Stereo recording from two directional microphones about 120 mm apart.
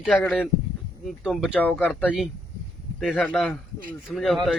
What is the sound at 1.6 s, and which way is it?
Speech, 15° left (ahead or behind).